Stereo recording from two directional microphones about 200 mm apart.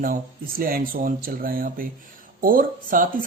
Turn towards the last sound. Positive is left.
turn(degrees=-45)  # may be behind; listen again after turning